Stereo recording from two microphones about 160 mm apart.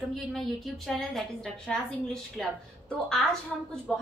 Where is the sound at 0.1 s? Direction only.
Centre (ahead or behind).